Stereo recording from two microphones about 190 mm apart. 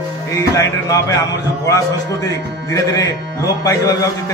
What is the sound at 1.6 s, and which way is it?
A man's voice, 15° left (ahead or behind).